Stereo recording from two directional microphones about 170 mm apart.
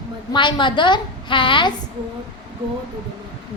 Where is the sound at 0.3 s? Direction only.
30° left (ahead or behind).